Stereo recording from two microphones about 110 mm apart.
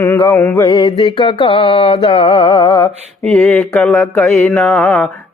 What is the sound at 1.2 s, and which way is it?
Music, 50° left (ahead or behind).